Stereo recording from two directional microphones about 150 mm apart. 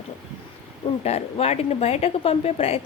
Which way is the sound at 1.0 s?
45° left (ahead or behind).